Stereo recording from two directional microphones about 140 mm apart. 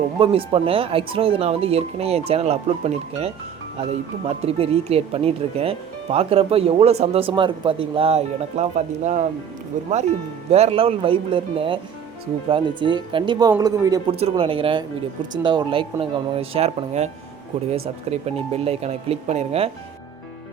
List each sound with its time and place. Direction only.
0.2 s speech: 40° right (ahead or behind); by 9.9 s 60° right (ahead or behind)
10.5 s a man's voice: 45° right (ahead or behind); by 14.0 s 25° right (ahead or behind)
14.1 s speech: 45° right (ahead or behind)